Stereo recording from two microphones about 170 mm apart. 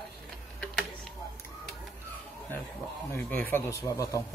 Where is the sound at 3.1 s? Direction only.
10° left (ahead or behind).